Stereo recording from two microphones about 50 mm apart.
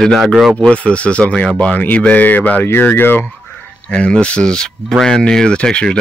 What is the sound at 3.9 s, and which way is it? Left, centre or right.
Speech, centre.